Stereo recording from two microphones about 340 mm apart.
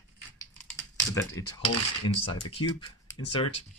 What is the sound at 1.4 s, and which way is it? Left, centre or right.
Speech, centre.